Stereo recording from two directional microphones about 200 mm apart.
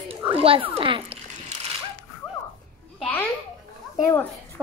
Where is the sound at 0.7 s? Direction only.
25° right (ahead or behind).